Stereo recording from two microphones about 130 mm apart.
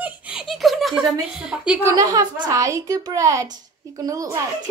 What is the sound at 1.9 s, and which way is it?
A woman's voice, 25° right (ahead or behind).